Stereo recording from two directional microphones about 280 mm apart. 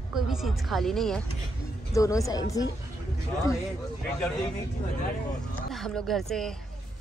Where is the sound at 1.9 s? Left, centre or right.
Centre.